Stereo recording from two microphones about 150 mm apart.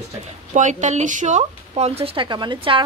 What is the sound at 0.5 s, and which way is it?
Speech, 55° right (ahead or behind).